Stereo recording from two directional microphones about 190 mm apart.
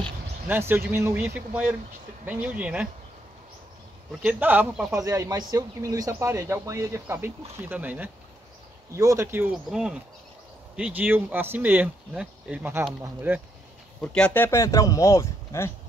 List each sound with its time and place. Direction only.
0.5 s speech: 10° right (ahead or behind)
4.1 s speech: 10° right (ahead or behind)
4.9 s speech: 15° right (ahead or behind)
14.0 s speech: 5° left (ahead or behind)